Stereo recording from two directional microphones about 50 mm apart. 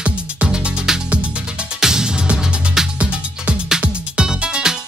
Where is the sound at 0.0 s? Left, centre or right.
Right.